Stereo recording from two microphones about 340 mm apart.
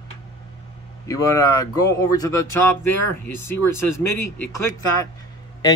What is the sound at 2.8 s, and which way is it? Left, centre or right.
Speech, left.